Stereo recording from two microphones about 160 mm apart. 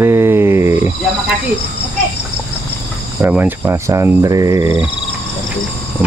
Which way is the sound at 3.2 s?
10° right (ahead or behind).